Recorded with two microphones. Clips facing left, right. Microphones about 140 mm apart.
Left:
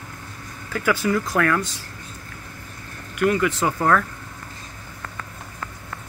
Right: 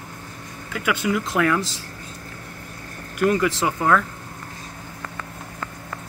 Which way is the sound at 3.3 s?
30° right (ahead or behind).